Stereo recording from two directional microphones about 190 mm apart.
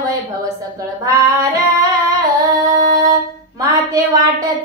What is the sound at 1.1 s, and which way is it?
Female singing, 15° right (ahead or behind).